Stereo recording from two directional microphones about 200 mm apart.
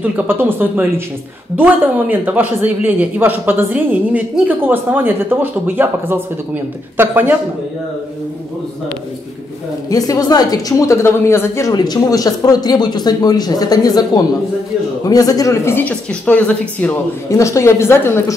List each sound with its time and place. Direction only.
0.0 s a man's voice: 10° right (ahead or behind)
9.8 s a woman's voice: 20° left (ahead or behind)